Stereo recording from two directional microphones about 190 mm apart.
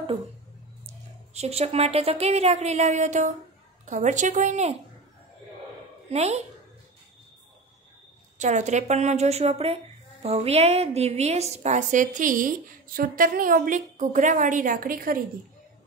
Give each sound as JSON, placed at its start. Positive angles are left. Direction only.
{"t": 0.8, "sound": "a woman's voice", "side_deg": -35}
{"t": 6.0, "sound": "a woman's voice", "side_deg": -35}
{"t": 8.4, "sound": "a woman's voice", "side_deg": -40}